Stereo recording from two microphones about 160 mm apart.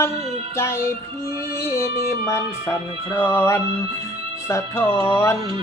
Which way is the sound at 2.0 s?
15° left (ahead or behind).